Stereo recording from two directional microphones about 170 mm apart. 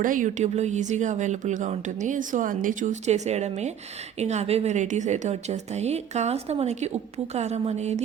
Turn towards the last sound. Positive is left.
turn(degrees=-40)  # may be behind; listen again after turning